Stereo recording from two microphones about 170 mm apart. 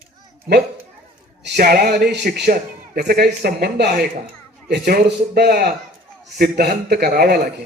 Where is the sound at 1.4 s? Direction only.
75° right (ahead or behind).